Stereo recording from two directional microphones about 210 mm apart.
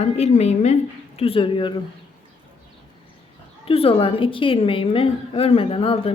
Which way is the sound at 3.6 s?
25° left (ahead or behind).